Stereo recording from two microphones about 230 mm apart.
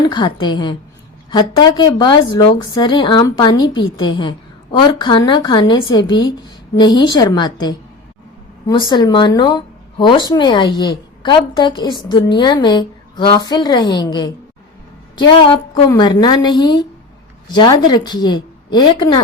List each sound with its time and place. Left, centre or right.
0.1 s a woman's voice: centre
15.4 s a woman's voice: left